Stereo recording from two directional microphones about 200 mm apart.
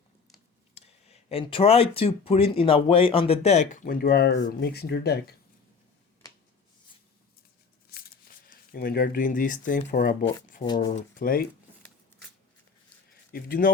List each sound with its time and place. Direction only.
0.7 s speech: 30° left (ahead or behind); by 5.3 s 50° left (ahead or behind)
7.9 s speech: 50° left (ahead or behind)
13.3 s speech: 45° left (ahead or behind)